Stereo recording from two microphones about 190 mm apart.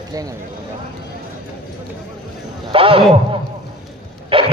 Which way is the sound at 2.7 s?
30° right (ahead or behind).